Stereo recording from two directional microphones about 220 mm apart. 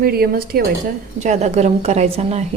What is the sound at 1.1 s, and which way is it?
A woman's voice, 35° right (ahead or behind).